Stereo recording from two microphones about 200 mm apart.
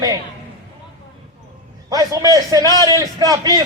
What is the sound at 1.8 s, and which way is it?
A man's voice, 20° right (ahead or behind).